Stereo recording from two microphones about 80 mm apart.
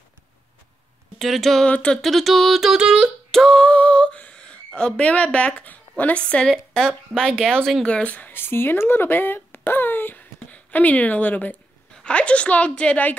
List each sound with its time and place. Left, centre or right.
1.1 s speech: centre
1.7 s a woman's voice: centre
2.0 s a sound: centre
3.3 s a sound: centre
6.5 s a woman's voice: centre
7.9 s a woman's voice: centre